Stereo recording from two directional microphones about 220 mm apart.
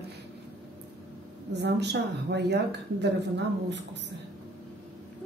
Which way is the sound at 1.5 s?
50° right (ahead or behind).